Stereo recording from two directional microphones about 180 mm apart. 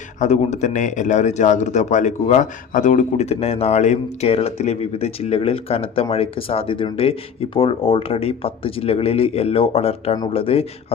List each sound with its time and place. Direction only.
0.2 s a man's voice: 40° left (ahead or behind)